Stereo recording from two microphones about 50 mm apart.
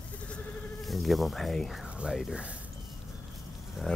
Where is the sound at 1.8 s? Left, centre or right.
Right.